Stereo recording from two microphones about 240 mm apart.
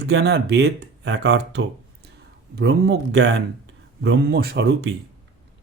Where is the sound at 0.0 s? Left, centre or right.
Right.